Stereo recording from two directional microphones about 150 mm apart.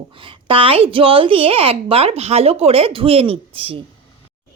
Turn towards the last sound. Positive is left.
turn(degrees=-40)  # may be behind; listen again after turning